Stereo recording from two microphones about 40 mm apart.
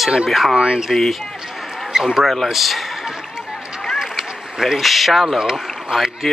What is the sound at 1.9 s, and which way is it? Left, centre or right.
Speech, centre.